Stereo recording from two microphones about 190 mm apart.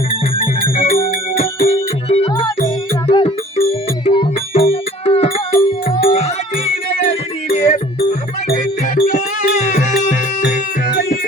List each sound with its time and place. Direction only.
0.1 s music: 30° left (ahead or behind)
7.5 s music: 35° left (ahead or behind)
8.4 s music: 50° left (ahead or behind)